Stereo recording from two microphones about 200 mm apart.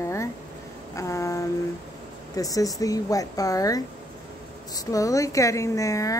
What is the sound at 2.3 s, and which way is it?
A woman's voice, 15° left (ahead or behind).